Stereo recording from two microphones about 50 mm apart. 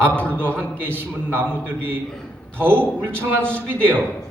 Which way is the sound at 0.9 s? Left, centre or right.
Right.